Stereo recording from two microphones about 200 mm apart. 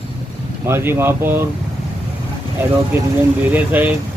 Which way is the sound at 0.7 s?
10° right (ahead or behind).